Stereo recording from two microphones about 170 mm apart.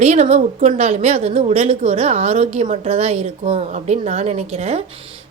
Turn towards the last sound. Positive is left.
turn(degrees=-40)  # may be behind; listen again after turning